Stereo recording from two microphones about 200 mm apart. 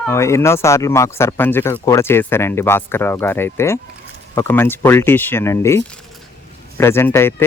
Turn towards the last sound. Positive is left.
turn(degrees=10)  # may be behind; listen again after turning